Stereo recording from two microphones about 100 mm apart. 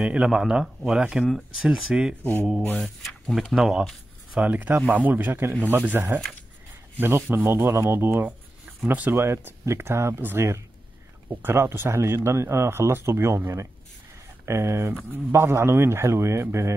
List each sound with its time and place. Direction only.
0.0 s speech: 10° right (ahead or behind)
2.7 s speech: 5° left (ahead or behind); by 16.7 s 30° right (ahead or behind)